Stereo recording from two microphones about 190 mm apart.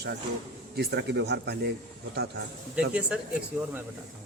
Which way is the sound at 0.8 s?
60° right (ahead or behind).